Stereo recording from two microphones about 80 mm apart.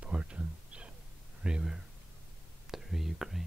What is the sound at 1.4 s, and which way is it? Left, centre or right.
Speech, centre.